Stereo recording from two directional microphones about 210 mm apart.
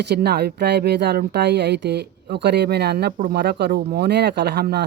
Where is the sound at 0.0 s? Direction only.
50° right (ahead or behind).